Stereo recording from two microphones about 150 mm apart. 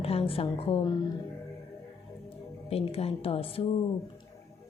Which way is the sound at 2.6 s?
40° left (ahead or behind).